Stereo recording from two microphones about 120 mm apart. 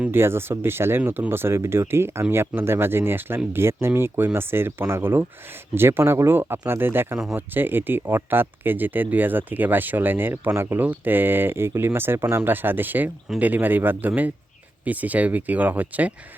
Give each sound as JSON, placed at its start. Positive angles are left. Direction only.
{"t": 0.0, "sound": "speech", "side_deg": -20}